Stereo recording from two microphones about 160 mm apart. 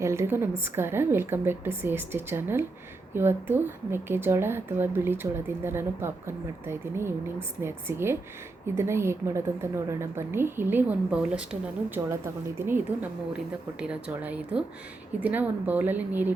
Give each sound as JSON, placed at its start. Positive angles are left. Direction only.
{"t": 0.0, "sound": "a woman's voice", "side_deg": -15}